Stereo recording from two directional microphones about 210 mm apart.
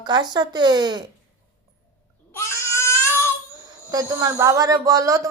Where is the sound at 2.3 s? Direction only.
10° left (ahead or behind).